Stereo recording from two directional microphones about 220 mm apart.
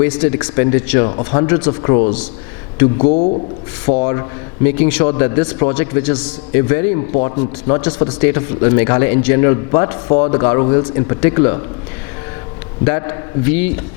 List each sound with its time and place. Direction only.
0.0 s a man's voice: 10° left (ahead or behind)
3.0 s speech: 35° left (ahead or behind)
4.0 s speech: 20° left (ahead or behind)
7.1 s a man's voice: 30° left (ahead or behind)
12.8 s speech: 20° left (ahead or behind)